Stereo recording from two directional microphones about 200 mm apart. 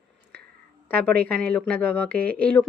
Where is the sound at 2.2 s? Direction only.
50° right (ahead or behind).